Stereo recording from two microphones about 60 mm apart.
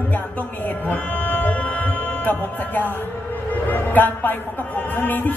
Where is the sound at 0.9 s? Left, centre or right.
Left.